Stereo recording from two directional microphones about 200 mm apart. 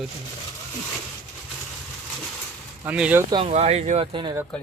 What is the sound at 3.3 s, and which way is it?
Speech, 25° right (ahead or behind).